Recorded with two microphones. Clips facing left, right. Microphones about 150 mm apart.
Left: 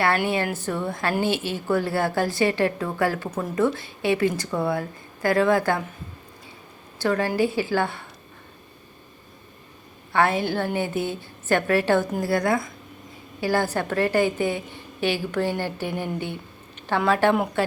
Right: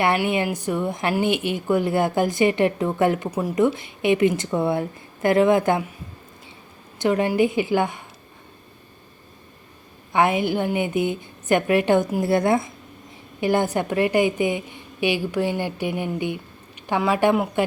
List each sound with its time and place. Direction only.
0.3 s a woman's voice: 15° right (ahead or behind)
7.0 s a woman's voice: 20° right (ahead or behind)
10.1 s a woman's voice: 15° right (ahead or behind)